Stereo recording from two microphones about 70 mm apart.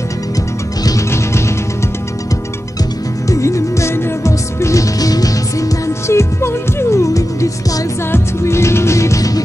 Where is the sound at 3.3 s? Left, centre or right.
Left.